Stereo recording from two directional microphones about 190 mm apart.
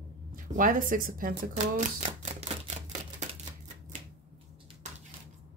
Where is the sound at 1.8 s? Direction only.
40° right (ahead or behind).